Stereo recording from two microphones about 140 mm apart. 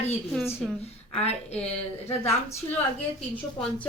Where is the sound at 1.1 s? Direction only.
50° left (ahead or behind).